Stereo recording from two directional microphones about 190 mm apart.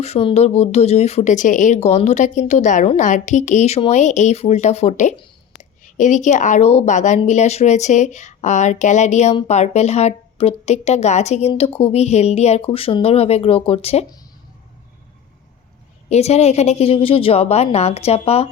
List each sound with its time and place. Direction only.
0.0 s speech: 30° left (ahead or behind)
5.1 s a sound: 25° left (ahead or behind)
5.8 s speech: 40° left (ahead or behind)
16.0 s speech: 35° left (ahead or behind)